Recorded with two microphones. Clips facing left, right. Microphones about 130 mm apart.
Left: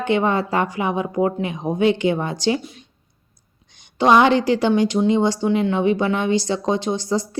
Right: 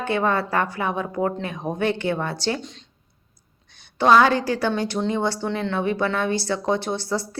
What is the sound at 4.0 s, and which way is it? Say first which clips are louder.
Speech: left 2 dB; 20° left (ahead or behind).